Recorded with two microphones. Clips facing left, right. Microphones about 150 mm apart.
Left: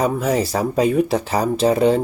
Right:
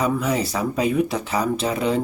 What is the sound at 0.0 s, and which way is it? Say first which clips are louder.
Speech: left 3 dB; 45° left (ahead or behind).